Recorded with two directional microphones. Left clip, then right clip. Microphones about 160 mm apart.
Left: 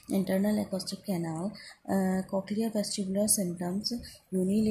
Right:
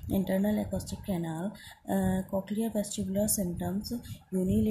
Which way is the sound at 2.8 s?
55° right (ahead or behind).